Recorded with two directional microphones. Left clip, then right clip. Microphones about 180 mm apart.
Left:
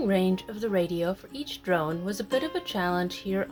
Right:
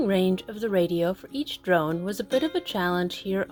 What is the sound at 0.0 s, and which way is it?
Speech, 40° right (ahead or behind).